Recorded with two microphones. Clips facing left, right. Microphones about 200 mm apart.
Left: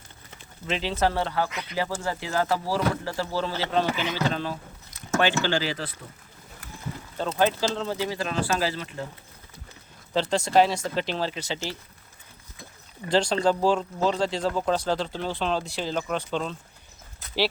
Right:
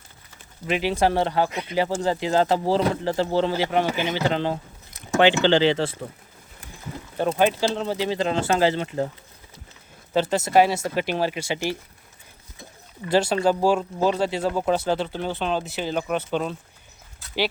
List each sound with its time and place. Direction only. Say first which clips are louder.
0.7 s speech: right 4 dB; 10° right (ahead or behind)
7.3 s speech: right 1 dB; 15° right (ahead or behind)
10.1 s speech: right 3 dB; 10° right (ahead or behind)
13.1 s speech: right 2 dB; 5° right (ahead or behind)